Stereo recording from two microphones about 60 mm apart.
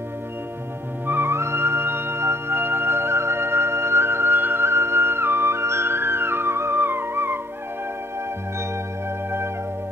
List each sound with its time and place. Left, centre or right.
1.0 s music: right